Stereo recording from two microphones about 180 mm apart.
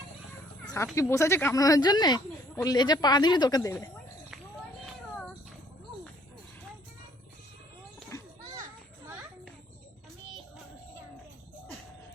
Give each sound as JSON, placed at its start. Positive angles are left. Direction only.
{"t": 0.9, "sound": "speech", "side_deg": 15}
{"t": 8.1, "sound": "children playing", "side_deg": 15}